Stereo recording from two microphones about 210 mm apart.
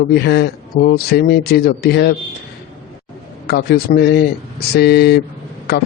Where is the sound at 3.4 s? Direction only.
50° left (ahead or behind).